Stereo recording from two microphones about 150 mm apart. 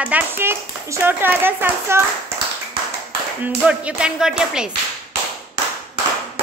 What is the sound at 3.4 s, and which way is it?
Speech, 10° right (ahead or behind).